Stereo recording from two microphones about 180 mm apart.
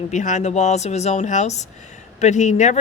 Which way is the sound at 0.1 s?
40° left (ahead or behind).